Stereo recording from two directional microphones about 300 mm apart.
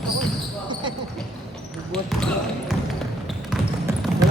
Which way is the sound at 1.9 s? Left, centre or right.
Centre.